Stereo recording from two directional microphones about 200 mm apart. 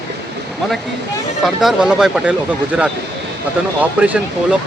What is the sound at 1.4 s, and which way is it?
Speech, centre (ahead or behind).